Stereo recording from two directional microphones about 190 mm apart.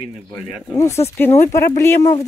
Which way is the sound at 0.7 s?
15° left (ahead or behind).